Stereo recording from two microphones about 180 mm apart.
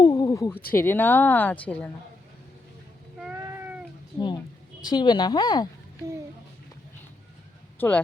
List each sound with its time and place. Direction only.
0.0 s a sound: 20° left (ahead or behind)
0.7 s a woman's voice: 10° left (ahead or behind)
3.3 s cat: 15° right (ahead or behind)
4.9 s speech: 25° left (ahead or behind)
7.8 s speech: 10° left (ahead or behind)